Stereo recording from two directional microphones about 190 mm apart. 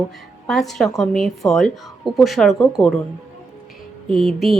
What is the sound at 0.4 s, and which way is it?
Speech, centre (ahead or behind).